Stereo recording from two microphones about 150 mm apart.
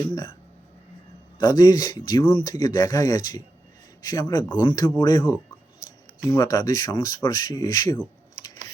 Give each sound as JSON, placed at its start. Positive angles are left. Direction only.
{"t": 0.1, "sound": "speech", "side_deg": 30}
{"t": 1.4, "sound": "speech", "side_deg": 25}
{"t": 6.3, "sound": "speech", "side_deg": 25}